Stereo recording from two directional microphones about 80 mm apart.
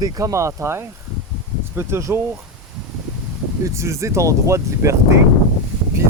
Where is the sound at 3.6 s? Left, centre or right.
Right.